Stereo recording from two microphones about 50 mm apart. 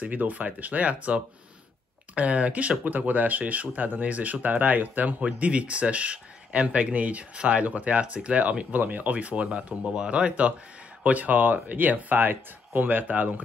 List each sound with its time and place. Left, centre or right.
0.1 s speech: right